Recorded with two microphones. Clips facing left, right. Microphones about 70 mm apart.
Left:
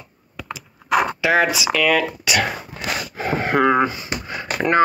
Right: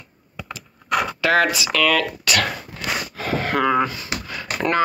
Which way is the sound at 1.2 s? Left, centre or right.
Centre.